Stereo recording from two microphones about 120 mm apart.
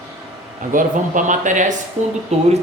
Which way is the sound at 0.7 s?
90° right.